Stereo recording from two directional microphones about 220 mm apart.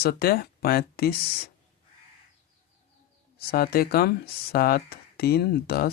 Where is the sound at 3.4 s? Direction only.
45° left (ahead or behind).